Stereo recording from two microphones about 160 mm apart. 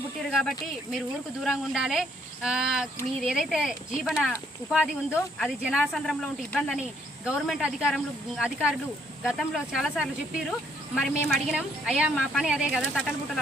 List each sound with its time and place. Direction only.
0.3 s speech: centre (ahead or behind)